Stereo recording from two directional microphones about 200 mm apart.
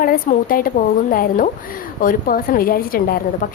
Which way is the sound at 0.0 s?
45° left (ahead or behind).